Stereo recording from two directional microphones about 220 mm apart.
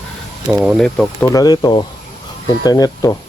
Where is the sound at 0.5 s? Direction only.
Centre (ahead or behind); by 3.2 s 15° left (ahead or behind).